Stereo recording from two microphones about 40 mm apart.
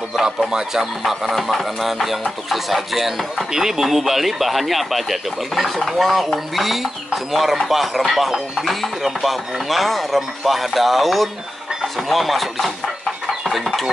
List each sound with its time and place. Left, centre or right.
0.5 s speech: centre
1.0 s speech: centre